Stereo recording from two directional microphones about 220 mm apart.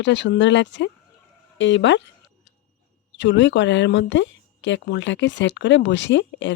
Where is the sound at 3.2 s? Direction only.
55° left (ahead or behind).